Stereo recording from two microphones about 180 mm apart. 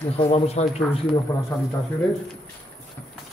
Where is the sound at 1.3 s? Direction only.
15° left (ahead or behind).